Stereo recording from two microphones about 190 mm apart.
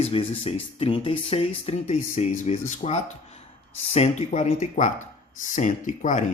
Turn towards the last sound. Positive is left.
turn(degrees=40)  # may be behind; listen again after turning